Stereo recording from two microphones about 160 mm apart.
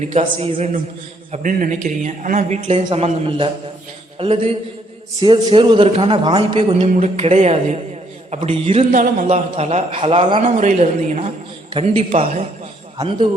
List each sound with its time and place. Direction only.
0.1 s a man's voice: 40° right (ahead or behind)
1.3 s a man's voice: 55° right (ahead or behind); by 8.9 s 40° right (ahead or behind)
8.9 s music: 55° right (ahead or behind)
9.2 s a man's voice: 40° right (ahead or behind)
10.6 s a man's voice: 45° right (ahead or behind)